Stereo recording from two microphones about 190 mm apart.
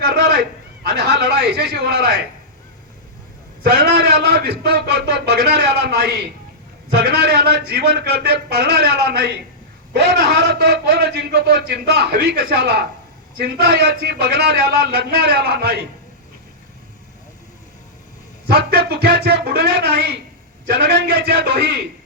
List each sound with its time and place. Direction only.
0.0 s a sound: 55° right (ahead or behind)
0.9 s a man's voice: 55° right (ahead or behind)
3.6 s a man's voice: 60° right (ahead or behind)
18.4 s a man's voice: 55° right (ahead or behind)